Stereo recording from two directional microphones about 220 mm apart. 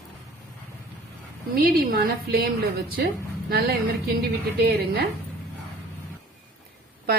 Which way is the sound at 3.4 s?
45° right (ahead or behind).